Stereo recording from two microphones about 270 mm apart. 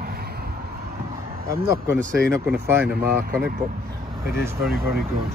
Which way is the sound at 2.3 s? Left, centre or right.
Centre.